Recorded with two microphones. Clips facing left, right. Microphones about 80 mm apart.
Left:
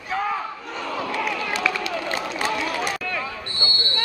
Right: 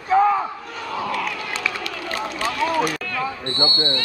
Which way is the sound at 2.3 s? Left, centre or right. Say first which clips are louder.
Right 4 dB; left.